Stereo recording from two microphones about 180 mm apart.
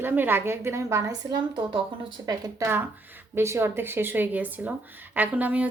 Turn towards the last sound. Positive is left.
turn(degrees=-10)  # may be behind; listen again after turning